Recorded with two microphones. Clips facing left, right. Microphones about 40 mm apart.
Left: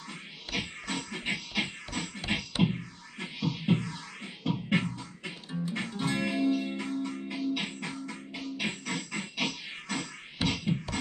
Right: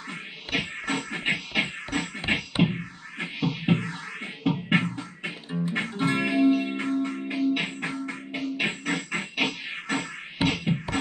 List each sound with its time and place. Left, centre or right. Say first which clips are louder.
0.1 s music: right 6 dB; right
5.5 s music: right 5 dB; right
5.8 s music: right 6 dB; right